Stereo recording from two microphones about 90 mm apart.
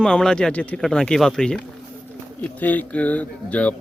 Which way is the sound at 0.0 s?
10° left (ahead or behind).